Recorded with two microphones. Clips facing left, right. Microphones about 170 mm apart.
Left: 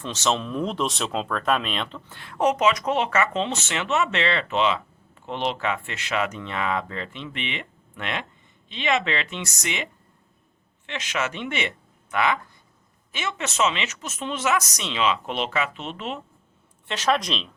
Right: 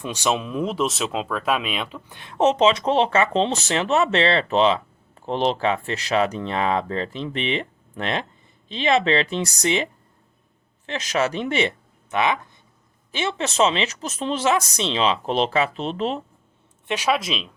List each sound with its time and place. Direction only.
0.0 s speech: 10° right (ahead or behind); by 11.7 s 35° right (ahead or behind)
12.1 s speech: 20° right (ahead or behind)
13.1 s speech: 30° right (ahead or behind)
16.9 s speech: 10° right (ahead or behind)